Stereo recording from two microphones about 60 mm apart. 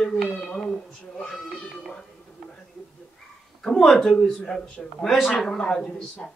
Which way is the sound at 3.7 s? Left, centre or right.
Centre.